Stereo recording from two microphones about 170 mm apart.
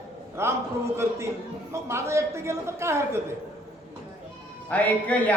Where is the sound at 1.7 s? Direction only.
15° right (ahead or behind).